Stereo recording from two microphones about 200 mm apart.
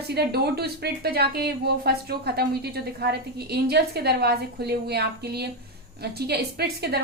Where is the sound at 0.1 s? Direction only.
55° right (ahead or behind).